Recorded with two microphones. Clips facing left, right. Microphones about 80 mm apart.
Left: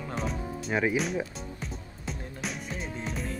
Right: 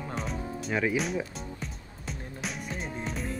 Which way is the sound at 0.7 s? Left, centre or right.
Centre.